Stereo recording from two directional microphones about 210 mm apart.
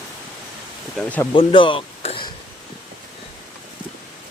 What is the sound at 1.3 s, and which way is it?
Speech, 25° left (ahead or behind).